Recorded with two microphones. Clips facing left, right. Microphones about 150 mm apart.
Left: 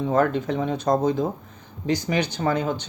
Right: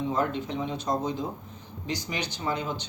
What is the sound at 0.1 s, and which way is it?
Speech, 55° left (ahead or behind).